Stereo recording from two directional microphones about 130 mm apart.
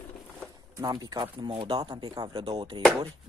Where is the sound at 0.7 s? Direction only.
30° right (ahead or behind).